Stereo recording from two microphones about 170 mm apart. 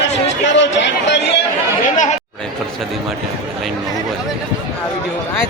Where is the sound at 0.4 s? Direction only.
90° left.